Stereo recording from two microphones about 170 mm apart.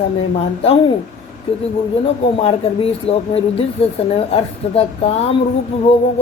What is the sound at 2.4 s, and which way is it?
Speech, 35° left (ahead or behind).